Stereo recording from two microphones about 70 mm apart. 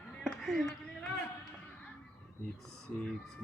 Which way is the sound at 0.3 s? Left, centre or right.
Centre.